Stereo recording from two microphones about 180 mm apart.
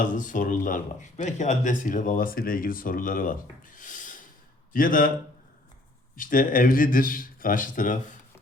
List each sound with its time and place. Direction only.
0.0 s speech: 45° left (ahead or behind)
6.1 s speech: 50° left (ahead or behind)